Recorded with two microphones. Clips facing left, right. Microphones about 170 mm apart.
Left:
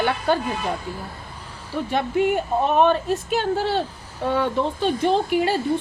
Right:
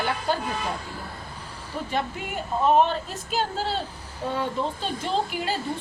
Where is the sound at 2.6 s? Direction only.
60° left (ahead or behind).